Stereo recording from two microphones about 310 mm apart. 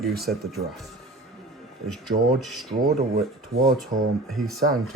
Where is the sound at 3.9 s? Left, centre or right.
Right.